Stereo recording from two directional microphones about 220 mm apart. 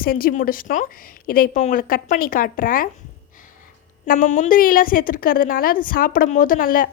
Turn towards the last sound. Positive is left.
turn(degrees=40)  # may be behind; listen again after turning